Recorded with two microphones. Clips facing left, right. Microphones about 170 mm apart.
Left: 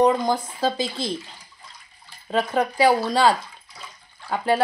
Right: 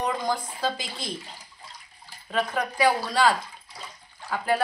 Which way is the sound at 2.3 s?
30° left (ahead or behind).